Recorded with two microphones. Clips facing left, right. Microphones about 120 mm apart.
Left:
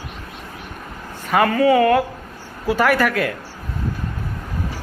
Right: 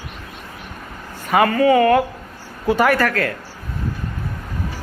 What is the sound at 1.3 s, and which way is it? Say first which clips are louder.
A woman's voice: right 1 dB; centre (ahead or behind).